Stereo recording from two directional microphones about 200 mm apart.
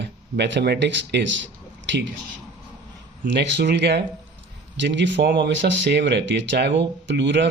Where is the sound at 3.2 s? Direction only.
60° right (ahead or behind).